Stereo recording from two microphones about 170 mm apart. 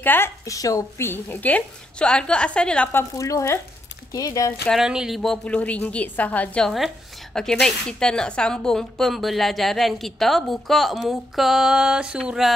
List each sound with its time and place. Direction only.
0.0 s a woman's voice: 10° left (ahead or behind)
4.6 s a woman's voice: 5° right (ahead or behind)